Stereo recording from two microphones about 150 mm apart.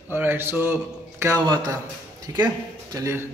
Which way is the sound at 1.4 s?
25° right (ahead or behind).